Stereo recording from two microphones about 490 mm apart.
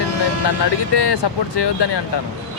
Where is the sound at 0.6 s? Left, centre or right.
Left.